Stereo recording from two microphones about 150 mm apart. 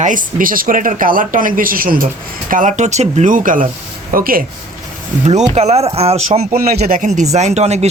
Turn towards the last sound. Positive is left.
turn(degrees=-45)  # may be behind; listen again after turning